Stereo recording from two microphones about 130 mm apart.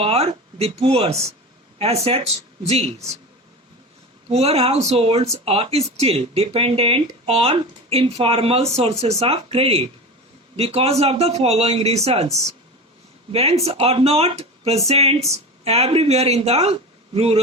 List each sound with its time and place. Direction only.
0.0 s speech: 50° right (ahead or behind)
4.3 s speech: 55° right (ahead or behind)